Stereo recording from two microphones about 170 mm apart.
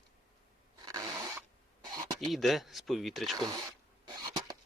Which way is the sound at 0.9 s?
20° right (ahead or behind).